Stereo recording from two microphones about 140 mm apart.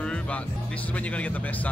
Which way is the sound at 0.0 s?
5° left (ahead or behind).